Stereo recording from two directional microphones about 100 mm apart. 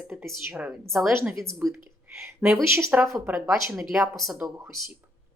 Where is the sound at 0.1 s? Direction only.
10° right (ahead or behind).